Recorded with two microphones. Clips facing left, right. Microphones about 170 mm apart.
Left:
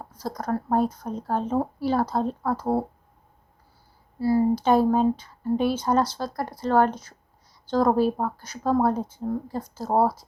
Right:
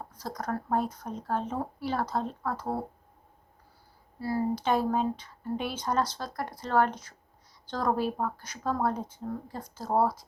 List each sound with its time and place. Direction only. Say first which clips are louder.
0.1 s speech: left 6 dB; 30° left (ahead or behind)
4.2 s speech: left 8 dB; 30° left (ahead or behind)